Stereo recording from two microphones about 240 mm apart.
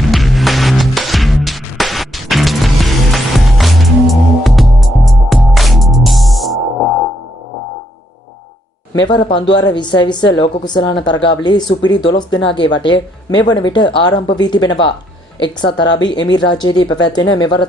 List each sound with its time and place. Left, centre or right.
0.1 s music: centre
9.0 s speech: centre
11.0 s speech: left
11.2 s speech: centre